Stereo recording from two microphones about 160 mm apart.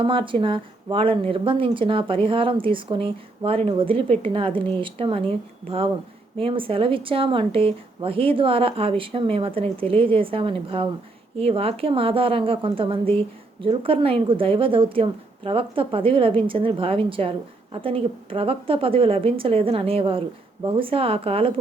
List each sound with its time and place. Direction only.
0.0 s a woman's voice: 30° right (ahead or behind)